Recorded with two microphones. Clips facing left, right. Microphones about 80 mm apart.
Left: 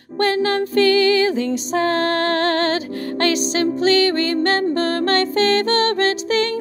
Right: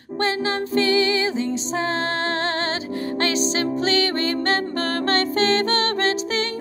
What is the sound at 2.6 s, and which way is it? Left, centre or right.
Music, left.